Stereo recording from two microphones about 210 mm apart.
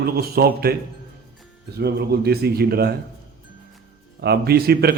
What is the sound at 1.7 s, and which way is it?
A man's voice, 50° right (ahead or behind).